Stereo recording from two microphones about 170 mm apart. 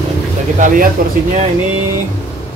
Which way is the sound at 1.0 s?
60° right (ahead or behind).